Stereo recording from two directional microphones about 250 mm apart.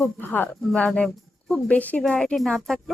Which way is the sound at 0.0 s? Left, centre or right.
Centre.